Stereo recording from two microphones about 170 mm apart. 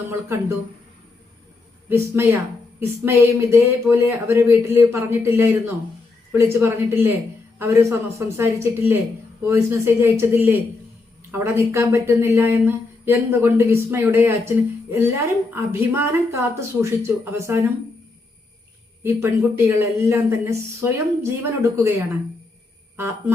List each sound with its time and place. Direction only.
0.1 s a woman's voice: 15° right (ahead or behind)
1.9 s a woman's voice: 15° right (ahead or behind)
19.0 s a woman's voice: 15° right (ahead or behind)